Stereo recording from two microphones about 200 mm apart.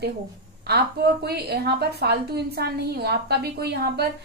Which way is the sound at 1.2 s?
55° right (ahead or behind).